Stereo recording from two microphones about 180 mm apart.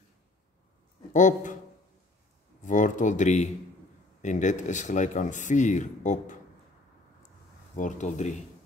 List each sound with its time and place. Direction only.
1.1 s speech: 45° left (ahead or behind)
2.6 s speech: 45° left (ahead or behind)
7.7 s speech: 45° left (ahead or behind)